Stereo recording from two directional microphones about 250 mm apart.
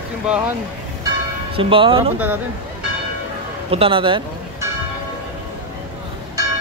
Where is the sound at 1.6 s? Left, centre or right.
Right.